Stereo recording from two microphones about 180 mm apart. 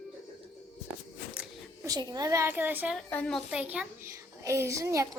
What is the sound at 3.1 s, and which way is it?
A child's voice, 5° left (ahead or behind).